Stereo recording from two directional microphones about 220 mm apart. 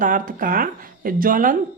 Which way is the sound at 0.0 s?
35° right (ahead or behind).